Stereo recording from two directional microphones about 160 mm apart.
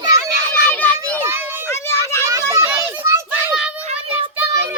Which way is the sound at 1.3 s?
15° right (ahead or behind).